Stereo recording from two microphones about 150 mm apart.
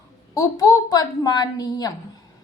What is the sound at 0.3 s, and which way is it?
A woman's voice, 25° left (ahead or behind).